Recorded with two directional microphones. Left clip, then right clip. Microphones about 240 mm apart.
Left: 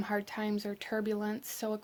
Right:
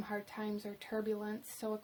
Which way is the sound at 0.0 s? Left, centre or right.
Left.